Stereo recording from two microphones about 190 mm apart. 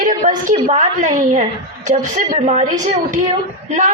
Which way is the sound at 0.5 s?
40° right (ahead or behind).